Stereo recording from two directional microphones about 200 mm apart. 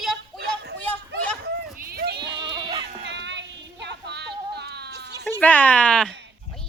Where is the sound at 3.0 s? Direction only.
60° right (ahead or behind).